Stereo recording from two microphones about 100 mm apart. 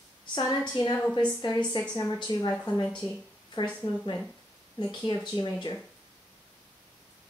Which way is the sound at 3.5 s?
50° left (ahead or behind).